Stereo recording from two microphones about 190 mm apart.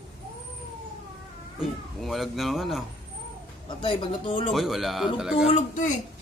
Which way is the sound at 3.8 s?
25° left (ahead or behind).